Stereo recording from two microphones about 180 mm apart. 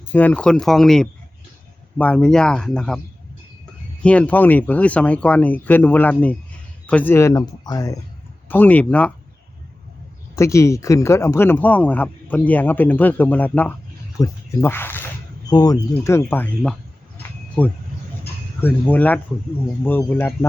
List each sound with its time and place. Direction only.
0.1 s speech: 10° left (ahead or behind)
4.0 s speech: 5° left (ahead or behind)
8.4 s speech: 10° left (ahead or behind)
10.3 s speech: 15° left (ahead or behind)